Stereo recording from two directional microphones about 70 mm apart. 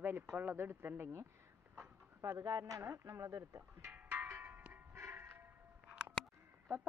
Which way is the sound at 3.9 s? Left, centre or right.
Right.